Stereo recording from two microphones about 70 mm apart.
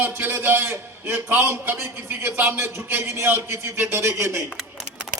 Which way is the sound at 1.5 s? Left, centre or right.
Right.